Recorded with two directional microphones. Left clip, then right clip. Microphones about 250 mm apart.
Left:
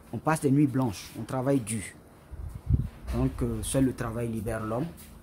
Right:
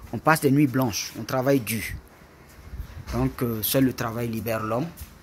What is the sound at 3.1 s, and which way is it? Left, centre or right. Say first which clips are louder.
Speech: right 4 dB; centre.